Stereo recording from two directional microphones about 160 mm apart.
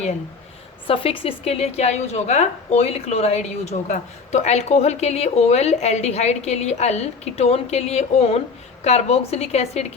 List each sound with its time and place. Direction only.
0.9 s speech: 35° left (ahead or behind)